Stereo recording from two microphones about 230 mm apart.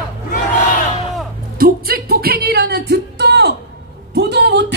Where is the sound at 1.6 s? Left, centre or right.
Right.